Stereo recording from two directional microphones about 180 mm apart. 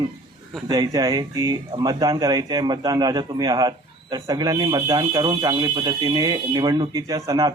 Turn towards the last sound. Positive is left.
turn(degrees=-20)  # may be behind; listen again after turning